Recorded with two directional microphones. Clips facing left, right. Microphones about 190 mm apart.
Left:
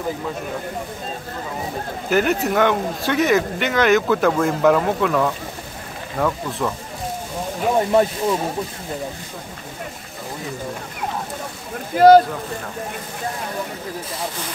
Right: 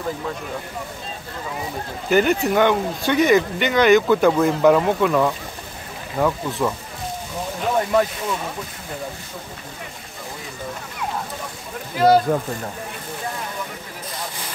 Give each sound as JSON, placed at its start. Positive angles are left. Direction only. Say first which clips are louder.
{"t": 2.0, "sound": "speech", "louder": "right 1 dB", "side_deg": 0}
{"t": 7.7, "sound": "speech", "louder": "left 2 dB", "side_deg": 25}
{"t": 11.9, "sound": "speech", "louder": "left 5 dB", "side_deg": 50}